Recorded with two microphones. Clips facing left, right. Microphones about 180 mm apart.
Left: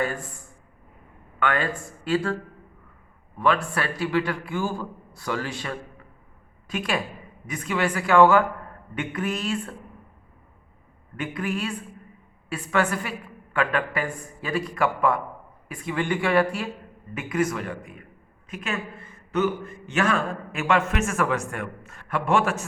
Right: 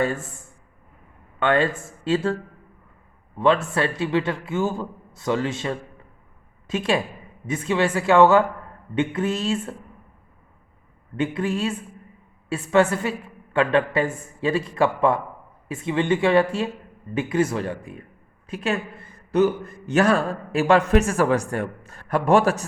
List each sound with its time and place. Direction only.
0.0 s a woman's voice: 25° right (ahead or behind)
3.3 s a woman's voice: 25° right (ahead or behind)
11.2 s a woman's voice: 25° right (ahead or behind)